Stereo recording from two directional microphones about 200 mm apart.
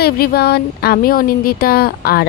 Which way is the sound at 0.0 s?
50° left (ahead or behind).